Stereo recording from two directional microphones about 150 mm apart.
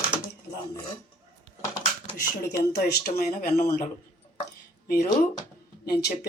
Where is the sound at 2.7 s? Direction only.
90° left.